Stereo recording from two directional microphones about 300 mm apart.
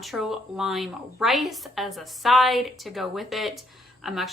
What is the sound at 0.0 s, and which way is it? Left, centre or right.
A woman's voice, centre.